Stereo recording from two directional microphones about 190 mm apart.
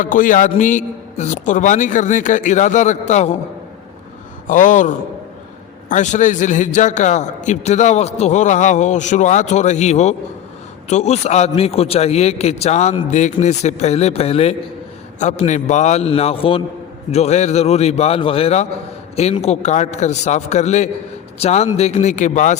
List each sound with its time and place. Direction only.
0.0 s a man's voice: 45° left (ahead or behind)
4.4 s a man's voice: 45° left (ahead or behind)